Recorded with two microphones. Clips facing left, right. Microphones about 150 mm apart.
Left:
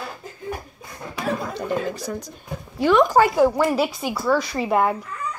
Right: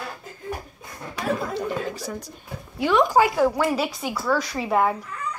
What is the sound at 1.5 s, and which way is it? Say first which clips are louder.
Chuckle: left 2 dB; 5° right (ahead or behind).